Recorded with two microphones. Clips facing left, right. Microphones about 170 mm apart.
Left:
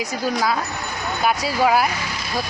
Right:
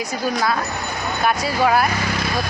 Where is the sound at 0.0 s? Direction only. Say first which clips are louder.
Even; 15° left (ahead or behind).